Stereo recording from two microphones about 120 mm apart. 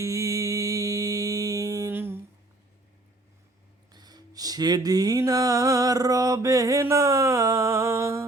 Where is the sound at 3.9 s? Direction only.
35° right (ahead or behind).